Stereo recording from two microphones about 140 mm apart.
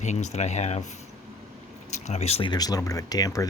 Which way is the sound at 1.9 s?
55° left (ahead or behind).